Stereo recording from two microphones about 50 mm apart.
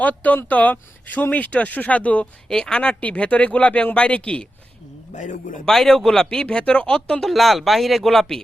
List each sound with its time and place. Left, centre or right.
0.0 s speech: left
2.5 s speech: centre
5.6 s speech: centre
6.4 s speech: left
7.3 s speech: centre